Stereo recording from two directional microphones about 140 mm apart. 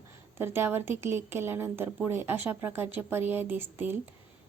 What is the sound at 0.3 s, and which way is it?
A woman's voice, 15° right (ahead or behind).